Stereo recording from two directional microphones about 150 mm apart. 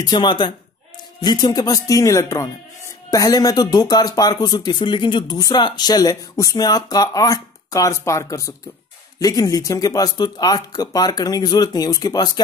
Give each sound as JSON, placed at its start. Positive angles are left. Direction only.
{"t": 0.0, "sound": "speech", "side_deg": 30}